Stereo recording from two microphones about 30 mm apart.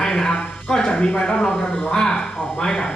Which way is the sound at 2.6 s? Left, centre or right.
Left.